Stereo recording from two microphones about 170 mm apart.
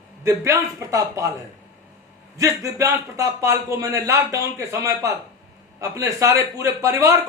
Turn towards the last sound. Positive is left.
turn(degrees=-15)  # may be behind; listen again after turning